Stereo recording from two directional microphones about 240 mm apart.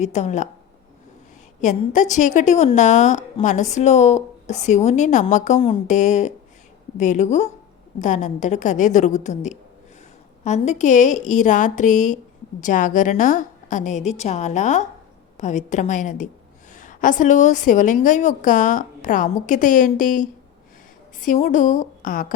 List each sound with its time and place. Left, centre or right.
0.0 s a woman's voice: left
1.6 s a woman's voice: left